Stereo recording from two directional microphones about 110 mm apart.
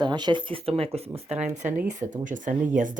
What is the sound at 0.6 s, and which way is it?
Speech, 65° right (ahead or behind).